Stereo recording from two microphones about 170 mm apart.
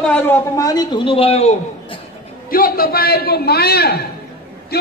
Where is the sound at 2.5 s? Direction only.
60° left (ahead or behind).